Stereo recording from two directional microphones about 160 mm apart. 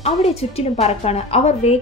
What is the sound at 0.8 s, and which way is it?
Speech, 40° left (ahead or behind).